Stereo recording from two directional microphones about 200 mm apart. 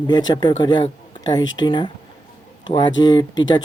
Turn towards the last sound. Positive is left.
turn(degrees=20)  # may be behind; listen again after turning